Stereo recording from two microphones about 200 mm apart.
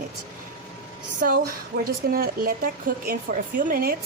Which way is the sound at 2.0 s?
50° right (ahead or behind).